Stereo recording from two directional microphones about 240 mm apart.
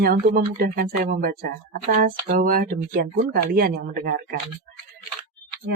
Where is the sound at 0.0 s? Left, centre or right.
Right.